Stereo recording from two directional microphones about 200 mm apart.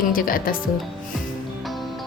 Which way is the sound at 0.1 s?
45° left (ahead or behind).